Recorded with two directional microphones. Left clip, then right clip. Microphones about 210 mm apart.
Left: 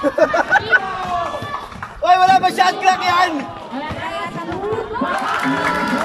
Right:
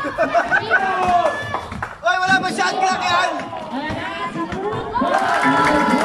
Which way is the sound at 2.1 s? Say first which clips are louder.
Left 5 dB; 40° left (ahead or behind).